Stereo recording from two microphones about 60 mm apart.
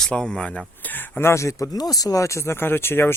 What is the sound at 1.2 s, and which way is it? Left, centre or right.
Speech, left.